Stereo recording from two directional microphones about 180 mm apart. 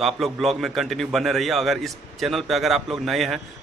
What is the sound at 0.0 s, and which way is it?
A man's voice, centre (ahead or behind).